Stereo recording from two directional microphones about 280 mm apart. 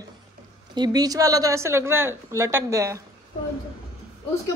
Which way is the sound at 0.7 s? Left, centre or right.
Centre.